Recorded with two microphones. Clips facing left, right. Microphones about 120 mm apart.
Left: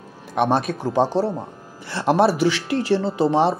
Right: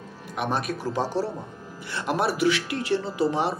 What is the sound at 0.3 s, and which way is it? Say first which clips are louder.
Speech: left 8 dB; 30° left (ahead or behind).